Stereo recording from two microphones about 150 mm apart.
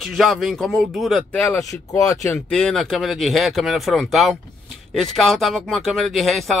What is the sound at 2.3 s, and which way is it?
Speech, 5° left (ahead or behind).